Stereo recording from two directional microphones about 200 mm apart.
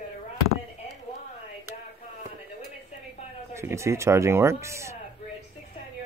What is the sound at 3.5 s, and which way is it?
Speech, 15° right (ahead or behind).